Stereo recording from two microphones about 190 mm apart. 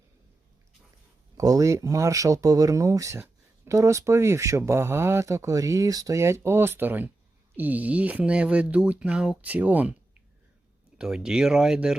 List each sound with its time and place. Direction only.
1.4 s speech: 15° right (ahead or behind)
10.9 s speech: 5° right (ahead or behind)